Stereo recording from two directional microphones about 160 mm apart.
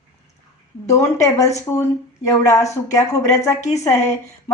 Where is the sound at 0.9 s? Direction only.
20° left (ahead or behind).